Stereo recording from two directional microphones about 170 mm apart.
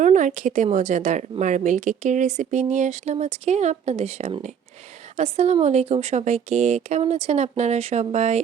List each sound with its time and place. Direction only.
0.0 s a woman's voice: 45° right (ahead or behind)